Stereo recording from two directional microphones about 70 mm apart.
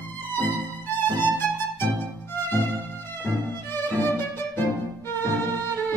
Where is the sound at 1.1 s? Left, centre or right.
Left.